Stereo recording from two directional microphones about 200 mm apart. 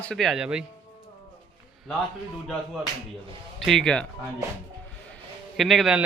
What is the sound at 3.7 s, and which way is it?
Speech, 5° left (ahead or behind).